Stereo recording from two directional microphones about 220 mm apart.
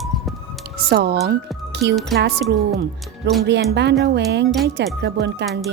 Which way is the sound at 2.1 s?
50° right (ahead or behind).